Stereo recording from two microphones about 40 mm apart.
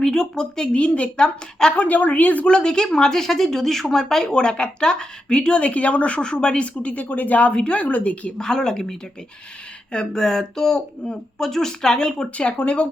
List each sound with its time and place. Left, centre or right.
0.0 s speech: centre
0.8 s a woman's voice: left
1.7 s a woman's voice: left
2.5 s speech: left
8.4 s speech: centre
12.4 s a woman's voice: left